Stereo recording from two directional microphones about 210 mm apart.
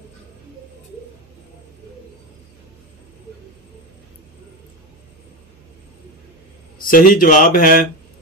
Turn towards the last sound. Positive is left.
turn(degrees=40)  # may be behind; listen again after turning